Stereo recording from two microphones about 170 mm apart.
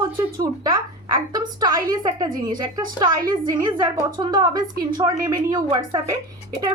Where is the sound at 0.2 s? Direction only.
20° right (ahead or behind).